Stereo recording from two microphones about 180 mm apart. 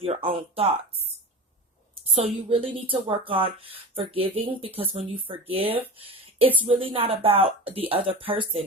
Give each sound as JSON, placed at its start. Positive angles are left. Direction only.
{"t": 0.0, "sound": "speech", "side_deg": -30}
{"t": 2.1, "sound": "speech", "side_deg": -30}